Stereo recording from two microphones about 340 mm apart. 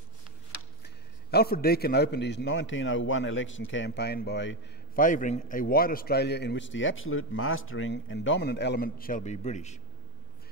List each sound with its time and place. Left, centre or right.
0.8 s a man's voice: left